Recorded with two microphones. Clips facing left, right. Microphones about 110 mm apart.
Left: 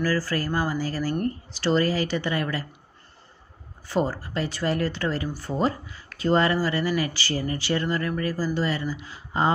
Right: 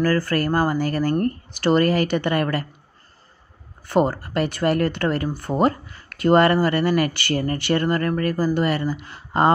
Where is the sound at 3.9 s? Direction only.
60° right (ahead or behind).